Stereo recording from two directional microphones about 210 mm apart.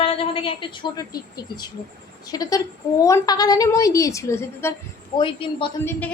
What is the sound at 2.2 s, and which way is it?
A woman's voice, 15° left (ahead or behind).